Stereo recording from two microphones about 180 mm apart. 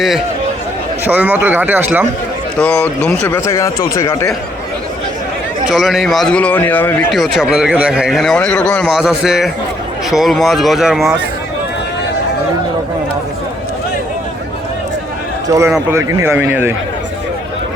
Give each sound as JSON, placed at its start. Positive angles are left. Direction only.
{"t": 1.0, "sound": "speech", "side_deg": -10}
{"t": 2.6, "sound": "a man's voice", "side_deg": 5}
{"t": 5.6, "sound": "a man's voice", "side_deg": 0}
{"t": 7.1, "sound": "speech", "side_deg": 0}
{"t": 15.4, "sound": "a man's voice", "side_deg": -20}